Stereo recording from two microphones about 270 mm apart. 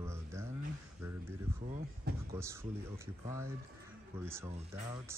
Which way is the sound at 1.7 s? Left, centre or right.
Right.